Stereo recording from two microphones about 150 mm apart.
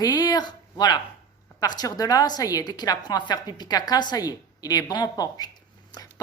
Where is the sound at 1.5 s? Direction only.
25° left (ahead or behind).